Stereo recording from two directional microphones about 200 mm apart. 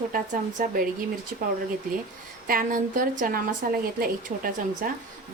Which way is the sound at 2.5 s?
45° right (ahead or behind).